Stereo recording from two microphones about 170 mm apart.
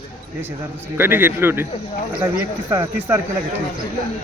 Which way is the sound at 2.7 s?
15° right (ahead or behind).